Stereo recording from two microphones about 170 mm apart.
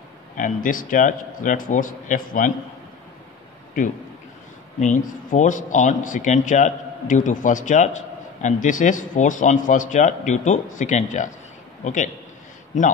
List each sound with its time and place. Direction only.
0.4 s speech: 55° left (ahead or behind)
4.7 s a man's voice: 45° left (ahead or behind)